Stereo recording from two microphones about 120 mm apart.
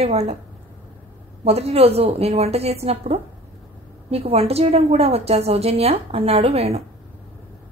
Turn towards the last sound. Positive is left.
turn(degrees=-60)  # may be behind; listen again after turning